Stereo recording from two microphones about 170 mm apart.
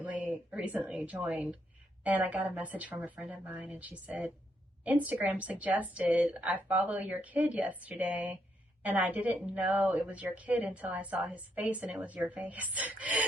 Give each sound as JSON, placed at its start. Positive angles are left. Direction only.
{"t": 0.0, "sound": "a woman's voice", "side_deg": -10}